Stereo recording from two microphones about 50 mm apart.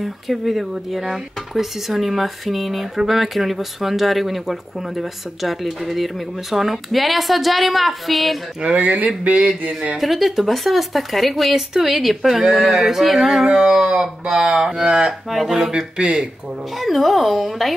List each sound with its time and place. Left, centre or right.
0.0 s speech: centre
8.6 s speech: right
9.9 s speech: centre
15.2 s speech: centre
15.7 s speech: centre
16.7 s speech: centre